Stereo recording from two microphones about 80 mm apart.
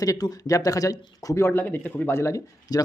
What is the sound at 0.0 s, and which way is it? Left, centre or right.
Speech, left.